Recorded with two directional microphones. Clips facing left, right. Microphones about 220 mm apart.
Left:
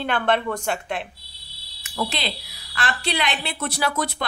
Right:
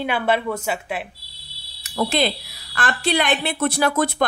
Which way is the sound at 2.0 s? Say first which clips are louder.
Right 7 dB; 50° right (ahead or behind).